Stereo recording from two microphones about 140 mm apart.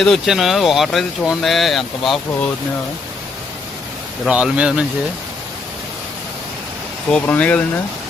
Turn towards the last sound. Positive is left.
turn(degrees=10)  # may be behind; listen again after turning